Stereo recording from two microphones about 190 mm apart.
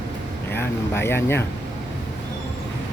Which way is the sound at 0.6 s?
10° left (ahead or behind).